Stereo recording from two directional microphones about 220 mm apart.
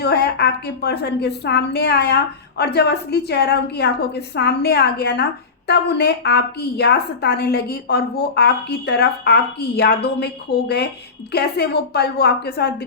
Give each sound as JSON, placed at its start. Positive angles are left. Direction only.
{"t": 0.0, "sound": "a woman's voice", "side_deg": 50}